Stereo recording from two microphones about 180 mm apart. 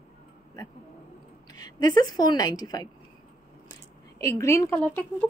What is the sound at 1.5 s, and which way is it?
A woman's voice, 20° left (ahead or behind).